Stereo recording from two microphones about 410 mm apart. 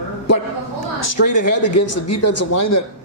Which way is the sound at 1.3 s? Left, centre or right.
Left.